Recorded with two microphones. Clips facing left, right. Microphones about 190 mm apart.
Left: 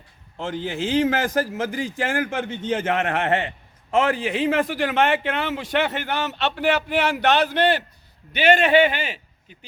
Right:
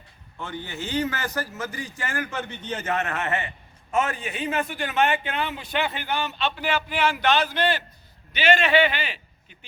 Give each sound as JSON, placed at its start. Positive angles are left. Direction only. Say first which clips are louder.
{"t": 0.4, "sound": "a man's voice", "louder": "left 7 dB", "side_deg": 90}